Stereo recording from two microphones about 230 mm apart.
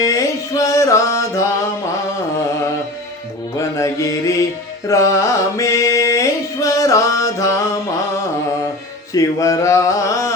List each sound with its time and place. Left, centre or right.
0.0 s mantra: centre
3.6 s mantra: centre
4.9 s music: centre
9.1 s a sound: centre